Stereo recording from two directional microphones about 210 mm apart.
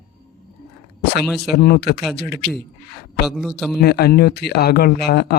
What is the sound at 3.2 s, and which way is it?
Speech, centre (ahead or behind).